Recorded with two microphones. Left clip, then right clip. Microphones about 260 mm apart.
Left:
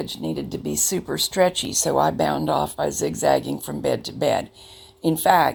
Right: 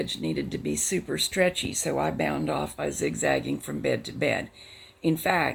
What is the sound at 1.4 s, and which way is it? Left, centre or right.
Speech, centre.